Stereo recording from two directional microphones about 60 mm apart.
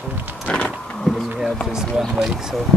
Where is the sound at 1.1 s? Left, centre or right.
Centre.